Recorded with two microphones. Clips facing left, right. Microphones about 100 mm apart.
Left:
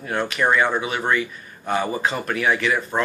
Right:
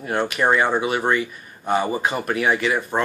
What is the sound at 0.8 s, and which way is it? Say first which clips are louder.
A man's voice: right 2 dB; 5° right (ahead or behind).